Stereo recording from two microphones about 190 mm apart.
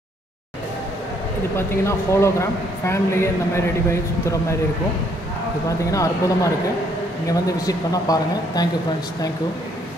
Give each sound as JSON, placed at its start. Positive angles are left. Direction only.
{"t": 1.9, "sound": "speech", "side_deg": 15}
{"t": 5.9, "sound": "speech", "side_deg": 15}